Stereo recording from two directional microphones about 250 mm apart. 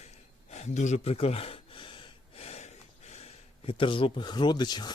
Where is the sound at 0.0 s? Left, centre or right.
Left.